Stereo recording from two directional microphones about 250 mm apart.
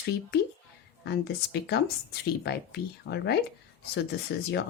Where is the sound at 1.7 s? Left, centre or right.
Left.